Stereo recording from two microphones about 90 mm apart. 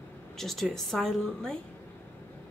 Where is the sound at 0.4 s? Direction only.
5° left (ahead or behind).